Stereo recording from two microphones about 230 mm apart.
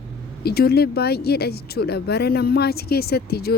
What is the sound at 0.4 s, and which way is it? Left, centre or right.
Speech, left.